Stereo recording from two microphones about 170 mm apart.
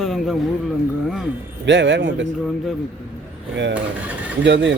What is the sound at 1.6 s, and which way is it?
Speech, 90° right.